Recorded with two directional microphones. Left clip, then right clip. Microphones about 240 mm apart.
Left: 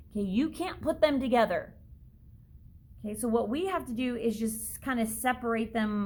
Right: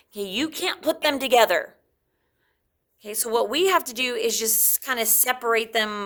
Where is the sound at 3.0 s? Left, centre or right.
Right.